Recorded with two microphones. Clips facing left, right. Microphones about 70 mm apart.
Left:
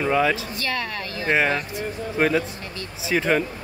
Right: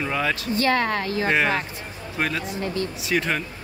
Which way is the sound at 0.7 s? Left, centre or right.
Right.